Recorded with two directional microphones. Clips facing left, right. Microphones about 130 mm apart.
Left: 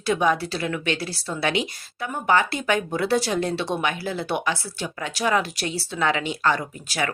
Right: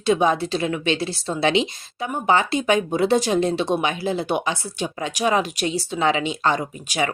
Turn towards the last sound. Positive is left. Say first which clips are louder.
# right 3 dB
turn(degrees=-20)  # may be behind; listen again after turning